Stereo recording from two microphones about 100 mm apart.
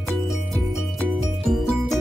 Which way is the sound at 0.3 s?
Centre (ahead or behind).